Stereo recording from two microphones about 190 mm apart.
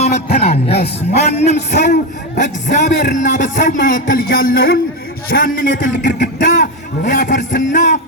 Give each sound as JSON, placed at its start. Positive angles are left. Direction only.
{"t": 0.3, "sound": "a man's voice", "side_deg": 35}